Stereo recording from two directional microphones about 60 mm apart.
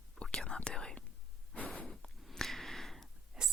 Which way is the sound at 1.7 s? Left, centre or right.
Centre.